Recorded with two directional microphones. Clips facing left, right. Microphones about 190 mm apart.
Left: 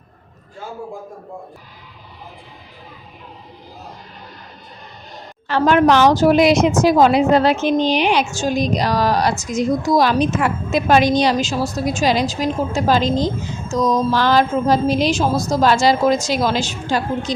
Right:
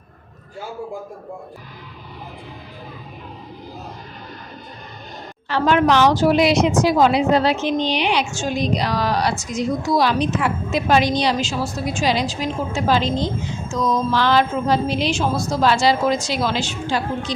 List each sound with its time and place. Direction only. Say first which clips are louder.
5.5 s a woman's voice: left 3 dB; 45° left (ahead or behind)